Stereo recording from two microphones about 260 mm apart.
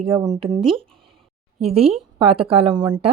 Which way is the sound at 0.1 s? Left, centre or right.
Centre.